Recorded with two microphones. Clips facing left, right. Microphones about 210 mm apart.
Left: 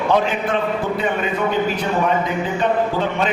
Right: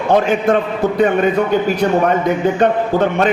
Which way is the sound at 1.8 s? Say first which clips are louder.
Right 5 dB; 55° right (ahead or behind).